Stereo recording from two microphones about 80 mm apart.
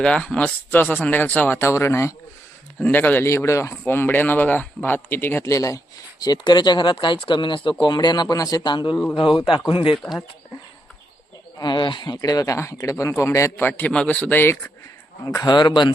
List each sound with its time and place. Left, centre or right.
0.0 s speech: centre; by 2.1 s left
2.8 s speech: left
3.2 s speech: left
6.2 s speech: left
8.6 s speech: left
9.1 s a man's voice: left
11.5 s speech: left
13.1 s a man's voice: left
13.6 s speech: left
15.4 s speech: left